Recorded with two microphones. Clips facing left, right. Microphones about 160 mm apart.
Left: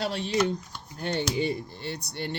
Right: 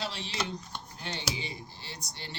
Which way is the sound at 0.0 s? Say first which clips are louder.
Left 7 dB; 55° left (ahead or behind).